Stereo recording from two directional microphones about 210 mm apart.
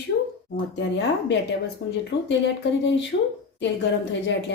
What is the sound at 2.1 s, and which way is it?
A woman's voice, 55° left (ahead or behind).